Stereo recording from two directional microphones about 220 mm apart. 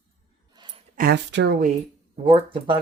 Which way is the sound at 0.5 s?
20° right (ahead or behind).